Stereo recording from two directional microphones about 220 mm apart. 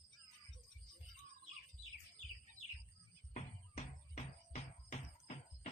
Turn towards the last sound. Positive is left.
turn(degrees=30)  # may be behind; listen again after turning